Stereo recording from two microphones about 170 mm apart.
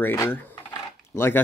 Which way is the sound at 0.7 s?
15° left (ahead or behind).